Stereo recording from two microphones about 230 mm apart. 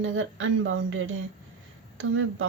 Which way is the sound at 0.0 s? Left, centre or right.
Right.